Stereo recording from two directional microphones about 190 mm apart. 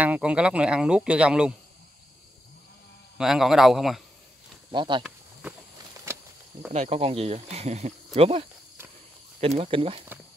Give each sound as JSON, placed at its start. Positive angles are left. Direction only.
{"t": 0.0, "sound": "speech", "side_deg": -5}
{"t": 3.2, "sound": "speech", "side_deg": -5}
{"t": 4.6, "sound": "speech", "side_deg": -25}
{"t": 6.1, "sound": "a sound", "side_deg": -15}
{"t": 6.7, "sound": "speech", "side_deg": -35}